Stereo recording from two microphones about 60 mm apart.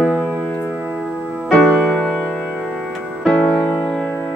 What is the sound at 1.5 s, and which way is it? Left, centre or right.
Music, centre.